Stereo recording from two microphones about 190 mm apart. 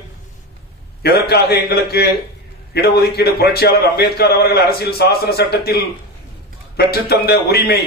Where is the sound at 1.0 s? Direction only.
55° left (ahead or behind).